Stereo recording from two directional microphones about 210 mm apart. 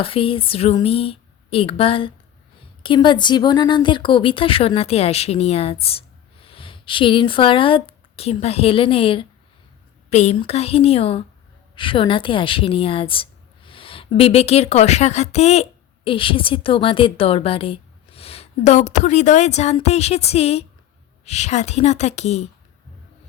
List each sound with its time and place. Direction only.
0.0 s a woman's voice: 25° left (ahead or behind)